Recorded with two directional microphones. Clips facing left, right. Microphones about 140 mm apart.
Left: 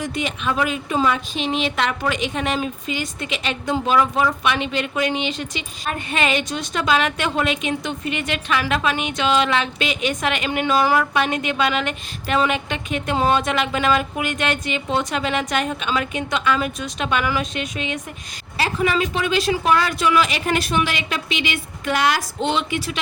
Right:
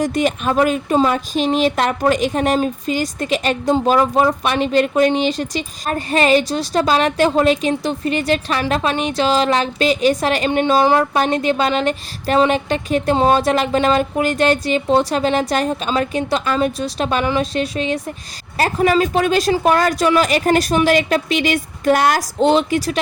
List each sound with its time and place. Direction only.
0.0 s a woman's voice: 40° right (ahead or behind)